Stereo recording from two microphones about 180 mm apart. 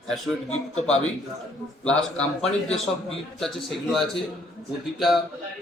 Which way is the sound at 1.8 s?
5° left (ahead or behind).